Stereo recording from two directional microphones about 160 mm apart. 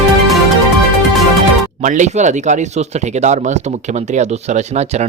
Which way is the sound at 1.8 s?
50° right (ahead or behind).